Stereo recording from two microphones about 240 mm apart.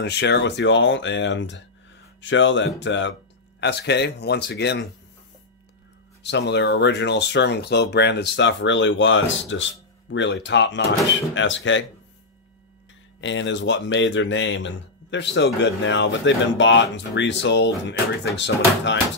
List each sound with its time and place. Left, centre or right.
0.0 s speech: left
6.2 s speech: left
13.2 s speech: left